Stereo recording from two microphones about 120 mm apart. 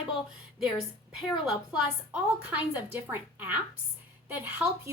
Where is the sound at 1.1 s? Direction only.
5° right (ahead or behind).